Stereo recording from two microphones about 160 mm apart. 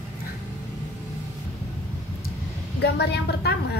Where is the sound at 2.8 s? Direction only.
90° left.